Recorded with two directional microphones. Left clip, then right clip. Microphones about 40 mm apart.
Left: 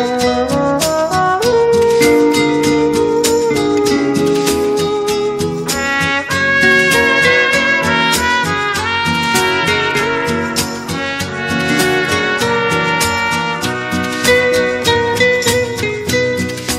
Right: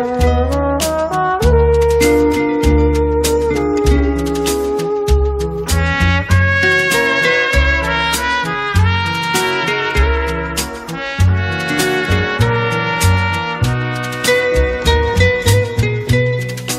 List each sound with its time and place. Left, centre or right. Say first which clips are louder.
0.9 s music: left 2 dB; left
1.3 s music: left 1 dB; left
5.9 s music: left 2 dB; left
11.7 s music: left 2 dB; left
14.2 s music: left 2 dB; left